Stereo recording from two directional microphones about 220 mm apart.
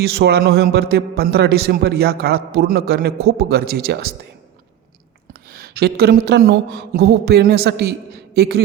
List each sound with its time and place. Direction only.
0.0 s a man's voice: 50° right (ahead or behind)
5.3 s a man's voice: 45° right (ahead or behind)